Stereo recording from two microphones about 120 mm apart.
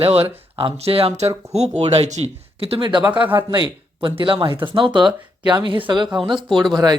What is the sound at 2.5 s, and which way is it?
Speech, 50° right (ahead or behind).